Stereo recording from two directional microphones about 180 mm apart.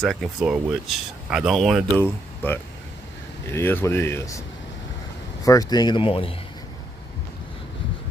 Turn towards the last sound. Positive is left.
turn(degrees=30)  # may be behind; listen again after turning